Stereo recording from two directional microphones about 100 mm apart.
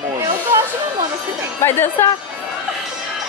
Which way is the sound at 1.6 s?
25° left (ahead or behind).